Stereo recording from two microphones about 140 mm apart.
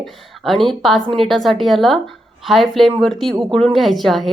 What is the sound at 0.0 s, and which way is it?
Speech, centre (ahead or behind).